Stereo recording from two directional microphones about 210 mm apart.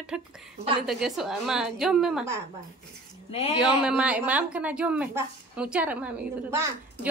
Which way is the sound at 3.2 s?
30° left (ahead or behind).